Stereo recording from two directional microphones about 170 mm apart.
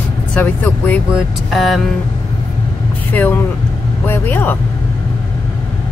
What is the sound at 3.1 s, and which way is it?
Speech, 10° left (ahead or behind).